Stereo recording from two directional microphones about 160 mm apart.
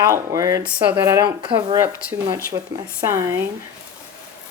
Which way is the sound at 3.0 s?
15° right (ahead or behind).